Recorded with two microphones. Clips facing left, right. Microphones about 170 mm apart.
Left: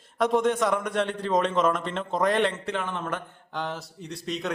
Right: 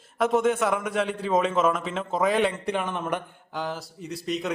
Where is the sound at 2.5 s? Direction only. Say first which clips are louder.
Right 2 dB; 15° right (ahead or behind).